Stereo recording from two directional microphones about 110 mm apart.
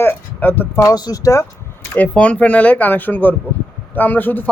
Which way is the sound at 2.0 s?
10° left (ahead or behind).